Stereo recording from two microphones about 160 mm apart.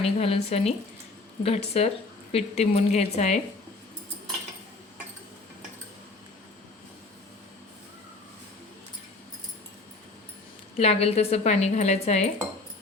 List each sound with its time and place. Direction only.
0.0 s a woman's voice: 40° left (ahead or behind)
10.8 s speech: 40° left (ahead or behind)